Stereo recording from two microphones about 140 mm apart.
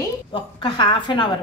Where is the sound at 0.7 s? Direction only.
35° left (ahead or behind).